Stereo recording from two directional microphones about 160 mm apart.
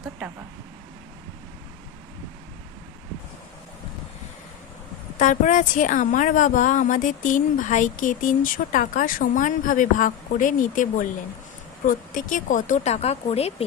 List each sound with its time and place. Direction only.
5.1 s a woman's voice: 55° left (ahead or behind)